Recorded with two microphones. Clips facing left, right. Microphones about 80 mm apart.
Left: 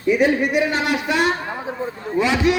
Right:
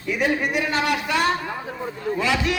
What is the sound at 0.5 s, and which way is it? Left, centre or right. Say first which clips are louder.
A man's voice: left 3 dB; left.